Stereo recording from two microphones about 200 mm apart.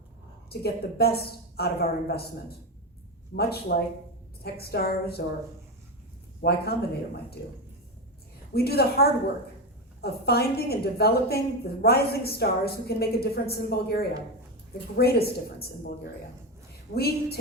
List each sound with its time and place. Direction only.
0.5 s a woman's voice: 50° left (ahead or behind)
3.3 s a woman's voice: 45° left (ahead or behind)
6.4 s a woman's voice: 50° left (ahead or behind)
8.5 s a woman's voice: 50° left (ahead or behind)
16.9 s a woman's voice: 50° left (ahead or behind)